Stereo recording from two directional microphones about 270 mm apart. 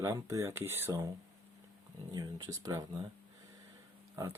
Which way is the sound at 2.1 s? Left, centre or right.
Centre.